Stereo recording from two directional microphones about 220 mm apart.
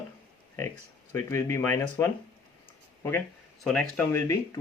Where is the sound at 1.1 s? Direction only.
10° left (ahead or behind).